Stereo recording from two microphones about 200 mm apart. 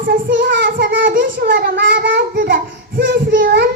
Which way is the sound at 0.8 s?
60° right (ahead or behind).